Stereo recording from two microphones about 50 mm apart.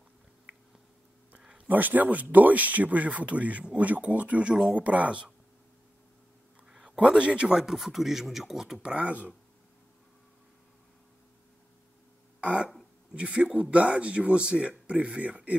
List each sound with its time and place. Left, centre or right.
1.7 s speech: right; by 4.7 s centre
4.7 s speech: right
7.1 s speech: right
9.0 s speech: right
12.4 s throat clearing: right
13.1 s speech: right